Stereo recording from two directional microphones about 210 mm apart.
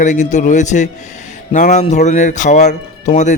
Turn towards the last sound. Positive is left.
turn(degrees=35)  # may be behind; listen again after turning